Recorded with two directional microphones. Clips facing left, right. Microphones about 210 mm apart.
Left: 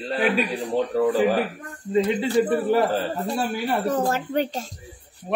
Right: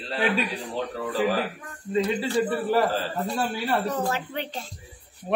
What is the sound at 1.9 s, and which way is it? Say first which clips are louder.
Speech: left 3 dB; 25° left (ahead or behind).